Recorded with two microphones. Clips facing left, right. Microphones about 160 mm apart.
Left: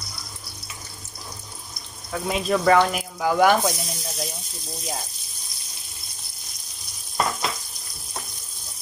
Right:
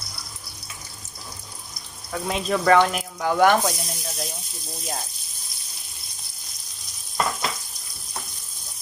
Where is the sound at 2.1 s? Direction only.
Centre (ahead or behind).